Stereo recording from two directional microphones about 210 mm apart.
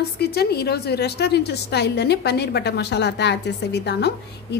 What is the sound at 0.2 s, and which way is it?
A woman's voice, 50° left (ahead or behind).